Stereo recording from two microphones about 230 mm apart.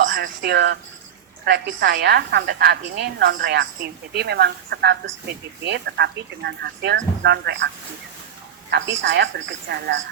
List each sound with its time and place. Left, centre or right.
0.1 s speech: right
8.7 s speech: right